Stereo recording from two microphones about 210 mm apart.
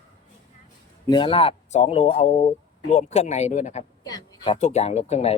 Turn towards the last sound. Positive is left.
turn(degrees=30)  # may be behind; listen again after turning